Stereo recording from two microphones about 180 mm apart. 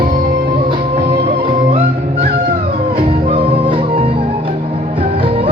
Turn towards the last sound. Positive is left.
turn(degrees=-30)  # may be behind; listen again after turning